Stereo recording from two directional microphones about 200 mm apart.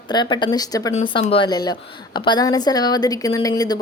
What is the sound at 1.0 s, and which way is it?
Speech, 30° left (ahead or behind).